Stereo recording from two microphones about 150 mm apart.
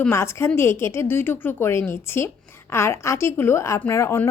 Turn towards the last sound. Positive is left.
turn(degrees=20)  # may be behind; listen again after turning